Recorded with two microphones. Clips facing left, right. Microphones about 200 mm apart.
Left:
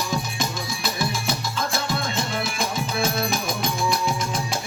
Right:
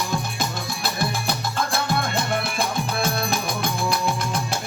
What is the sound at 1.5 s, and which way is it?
Music, 60° right (ahead or behind).